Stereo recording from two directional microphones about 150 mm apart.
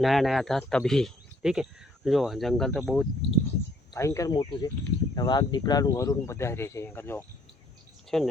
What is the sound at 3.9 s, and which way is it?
Speech, 20° left (ahead or behind).